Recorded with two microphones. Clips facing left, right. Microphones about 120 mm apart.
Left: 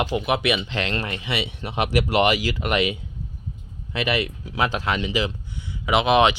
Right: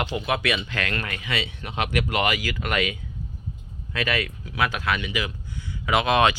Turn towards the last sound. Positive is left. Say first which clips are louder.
# left 3 dB
turn(degrees=20)  # may be behind; listen again after turning